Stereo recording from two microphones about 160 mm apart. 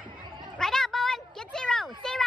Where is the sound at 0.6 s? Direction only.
5° left (ahead or behind).